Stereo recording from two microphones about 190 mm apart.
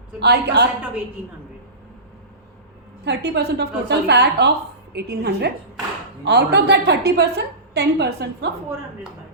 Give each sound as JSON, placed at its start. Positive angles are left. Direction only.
{"t": 0.2, "sound": "a woman's voice", "side_deg": -60}
{"t": 3.0, "sound": "a woman's voice", "side_deg": -60}